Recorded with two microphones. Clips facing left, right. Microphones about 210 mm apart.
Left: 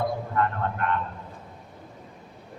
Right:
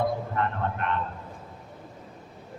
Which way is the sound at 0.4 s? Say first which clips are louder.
Left 4 dB; 20° right (ahead or behind).